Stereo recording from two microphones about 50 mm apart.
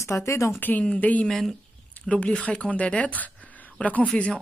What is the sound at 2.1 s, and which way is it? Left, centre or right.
Speech, left.